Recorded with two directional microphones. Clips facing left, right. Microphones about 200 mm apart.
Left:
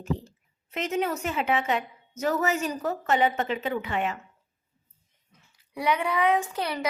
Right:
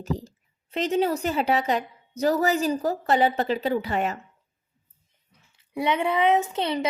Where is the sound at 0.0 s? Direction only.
40° right (ahead or behind).